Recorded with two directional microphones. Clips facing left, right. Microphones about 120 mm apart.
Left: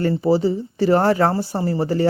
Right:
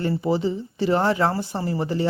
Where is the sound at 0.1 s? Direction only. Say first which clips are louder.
Left 5 dB; 35° left (ahead or behind).